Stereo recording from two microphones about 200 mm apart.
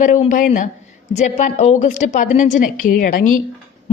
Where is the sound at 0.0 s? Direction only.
40° left (ahead or behind).